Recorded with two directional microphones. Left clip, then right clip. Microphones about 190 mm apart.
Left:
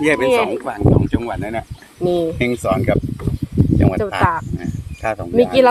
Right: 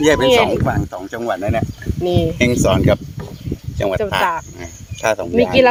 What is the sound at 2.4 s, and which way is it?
Speech, 40° right (ahead or behind).